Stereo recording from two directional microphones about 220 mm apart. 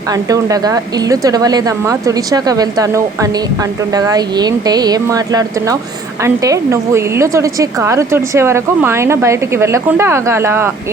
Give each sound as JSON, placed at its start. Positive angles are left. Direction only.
{"t": 0.1, "sound": "a woman's voice", "side_deg": -15}